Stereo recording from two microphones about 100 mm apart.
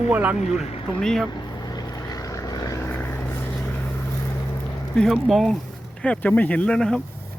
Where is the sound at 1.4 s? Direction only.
40° left (ahead or behind).